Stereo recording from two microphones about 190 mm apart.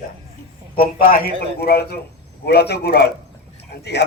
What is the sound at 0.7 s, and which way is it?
A man's voice, 50° left (ahead or behind).